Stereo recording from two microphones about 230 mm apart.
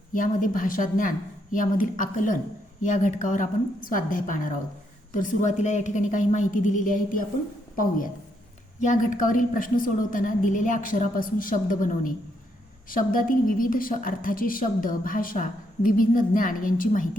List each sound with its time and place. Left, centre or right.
0.1 s a woman's voice: left